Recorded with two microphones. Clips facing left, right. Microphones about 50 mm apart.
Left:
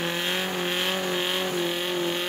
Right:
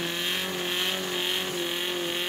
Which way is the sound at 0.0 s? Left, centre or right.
Centre.